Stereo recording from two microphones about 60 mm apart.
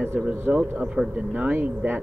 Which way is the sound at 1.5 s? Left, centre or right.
Right.